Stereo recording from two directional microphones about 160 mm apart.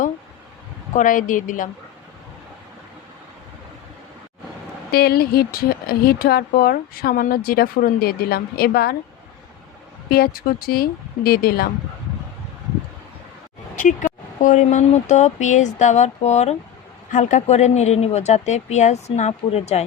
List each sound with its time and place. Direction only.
0.9 s a woman's voice: 55° left (ahead or behind)
4.9 s speech: 80° left
10.1 s speech: 70° left (ahead or behind)
13.7 s speech: 55° left (ahead or behind)